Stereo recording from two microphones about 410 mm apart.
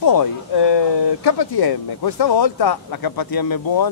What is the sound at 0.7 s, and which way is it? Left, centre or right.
Speech, left.